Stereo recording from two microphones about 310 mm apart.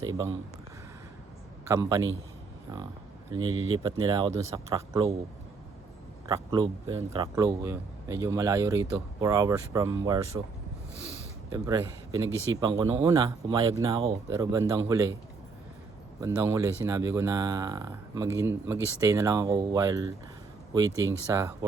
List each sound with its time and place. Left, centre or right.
0.0 s a man's voice: centre
1.6 s a man's voice: centre
3.5 s speech: right
4.0 s a man's voice: centre
6.2 s a man's voice: centre
11.5 s a man's voice: centre
16.2 s a man's voice: centre